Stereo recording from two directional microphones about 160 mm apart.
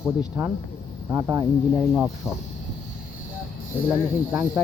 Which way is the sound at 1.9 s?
5° right (ahead or behind).